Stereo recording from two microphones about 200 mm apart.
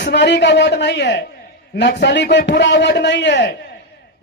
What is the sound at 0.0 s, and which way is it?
A man's voice, 60° left (ahead or behind).